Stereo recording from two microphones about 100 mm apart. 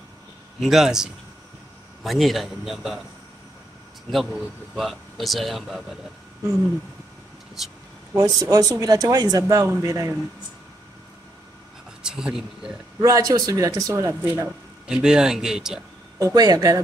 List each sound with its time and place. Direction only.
0.6 s speech: 5° right (ahead or behind)
4.1 s speech: centre (ahead or behind)
7.6 s speech: 5° right (ahead or behind)
8.1 s speech: 35° right (ahead or behind)
12.0 s speech: 10° right (ahead or behind)
13.0 s speech: 35° right (ahead or behind)
14.9 s speech: 10° right (ahead or behind)
16.2 s speech: 35° right (ahead or behind)